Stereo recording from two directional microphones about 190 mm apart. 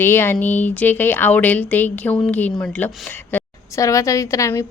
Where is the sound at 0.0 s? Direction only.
10° left (ahead or behind).